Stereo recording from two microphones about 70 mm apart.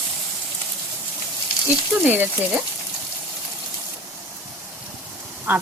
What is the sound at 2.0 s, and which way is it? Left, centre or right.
Speech, right.